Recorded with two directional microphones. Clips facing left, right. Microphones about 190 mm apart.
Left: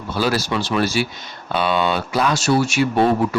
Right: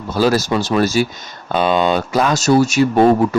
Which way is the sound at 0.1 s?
40° right (ahead or behind).